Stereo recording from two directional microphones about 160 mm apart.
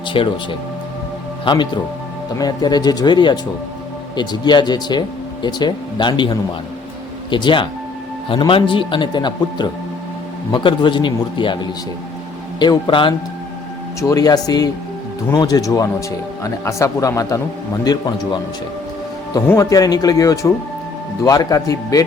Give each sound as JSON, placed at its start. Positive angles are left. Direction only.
{"t": 0.1, "sound": "a man's voice", "side_deg": 30}
{"t": 1.5, "sound": "a man's voice", "side_deg": 30}